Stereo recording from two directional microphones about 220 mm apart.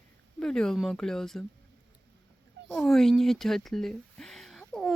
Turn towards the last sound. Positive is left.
turn(degrees=0)  # may be behind; listen again after turning